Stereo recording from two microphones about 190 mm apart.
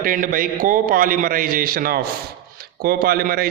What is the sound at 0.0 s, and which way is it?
A man's voice, 45° right (ahead or behind).